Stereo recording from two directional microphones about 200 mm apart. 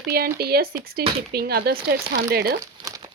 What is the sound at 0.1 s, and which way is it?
Speech, 50° right (ahead or behind).